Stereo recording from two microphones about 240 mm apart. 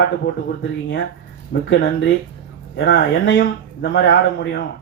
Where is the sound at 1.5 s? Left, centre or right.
Left.